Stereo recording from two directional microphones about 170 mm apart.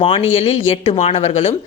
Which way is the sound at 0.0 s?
35° left (ahead or behind).